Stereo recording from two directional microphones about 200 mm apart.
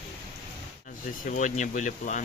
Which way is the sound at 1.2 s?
40° left (ahead or behind).